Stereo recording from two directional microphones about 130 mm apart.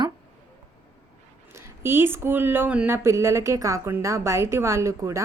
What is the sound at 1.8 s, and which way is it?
A woman's voice, 20° right (ahead or behind).